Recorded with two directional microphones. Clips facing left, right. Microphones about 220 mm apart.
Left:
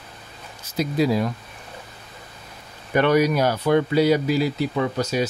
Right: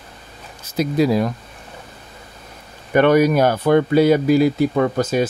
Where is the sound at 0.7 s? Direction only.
50° right (ahead or behind).